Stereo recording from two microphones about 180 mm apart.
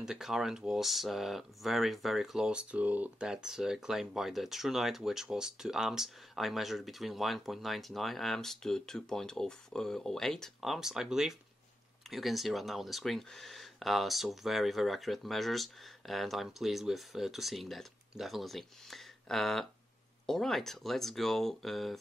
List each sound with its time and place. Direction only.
0.0 s speech: centre (ahead or behind)